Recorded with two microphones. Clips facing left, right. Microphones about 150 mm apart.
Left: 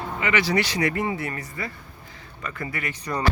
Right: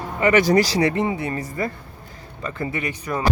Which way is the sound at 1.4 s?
45° right (ahead or behind).